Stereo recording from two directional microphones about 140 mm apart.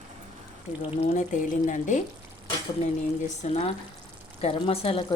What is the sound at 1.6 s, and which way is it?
Speech, 65° left (ahead or behind).